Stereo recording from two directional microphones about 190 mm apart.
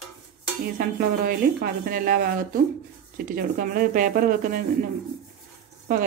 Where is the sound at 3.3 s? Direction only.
45° right (ahead or behind).